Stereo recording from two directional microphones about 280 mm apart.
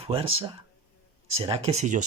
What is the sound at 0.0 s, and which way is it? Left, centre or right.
Speech, centre.